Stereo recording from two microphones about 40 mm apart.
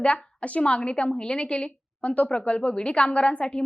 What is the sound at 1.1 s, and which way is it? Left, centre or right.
A woman's voice, left.